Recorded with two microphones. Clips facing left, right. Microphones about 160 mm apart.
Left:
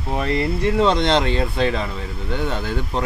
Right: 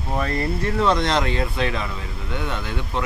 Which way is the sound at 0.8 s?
25° left (ahead or behind).